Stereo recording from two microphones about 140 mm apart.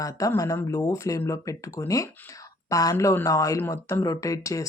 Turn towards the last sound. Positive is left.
turn(degrees=25)  # may be behind; listen again after turning